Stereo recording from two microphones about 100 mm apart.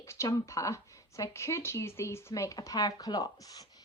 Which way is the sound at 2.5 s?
40° left (ahead or behind).